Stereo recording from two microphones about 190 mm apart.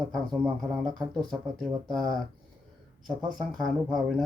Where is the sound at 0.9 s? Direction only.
20° right (ahead or behind).